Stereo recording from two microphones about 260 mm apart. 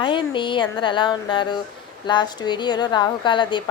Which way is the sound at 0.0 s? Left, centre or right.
Centre.